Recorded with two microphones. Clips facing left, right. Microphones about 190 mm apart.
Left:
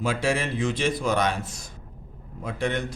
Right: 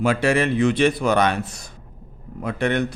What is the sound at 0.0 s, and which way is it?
A man's voice, 65° right (ahead or behind).